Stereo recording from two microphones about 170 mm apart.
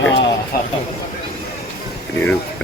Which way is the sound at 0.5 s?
60° left (ahead or behind).